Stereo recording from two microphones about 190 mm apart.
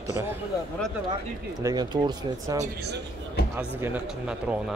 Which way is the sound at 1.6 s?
20° right (ahead or behind).